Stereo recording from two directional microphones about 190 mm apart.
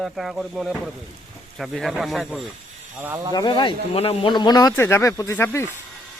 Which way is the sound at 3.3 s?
25° left (ahead or behind).